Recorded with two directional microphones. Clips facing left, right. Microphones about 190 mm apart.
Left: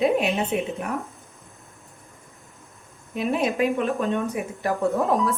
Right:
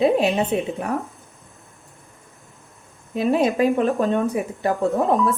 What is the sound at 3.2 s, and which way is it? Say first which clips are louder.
A woman's voice: right 4 dB; 35° right (ahead or behind).